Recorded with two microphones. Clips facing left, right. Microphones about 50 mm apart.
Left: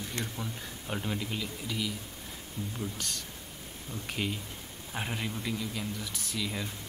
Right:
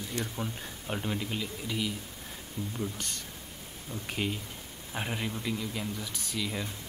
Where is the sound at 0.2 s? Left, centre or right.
Left.